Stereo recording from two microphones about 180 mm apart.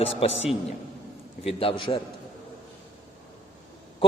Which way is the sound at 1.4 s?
30° left (ahead or behind).